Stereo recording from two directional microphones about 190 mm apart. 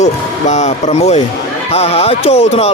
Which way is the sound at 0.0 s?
40° left (ahead or behind).